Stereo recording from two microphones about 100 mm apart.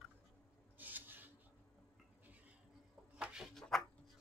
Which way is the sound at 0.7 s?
20° right (ahead or behind).